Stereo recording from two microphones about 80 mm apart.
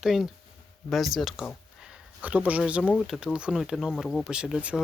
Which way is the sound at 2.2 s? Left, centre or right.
Centre.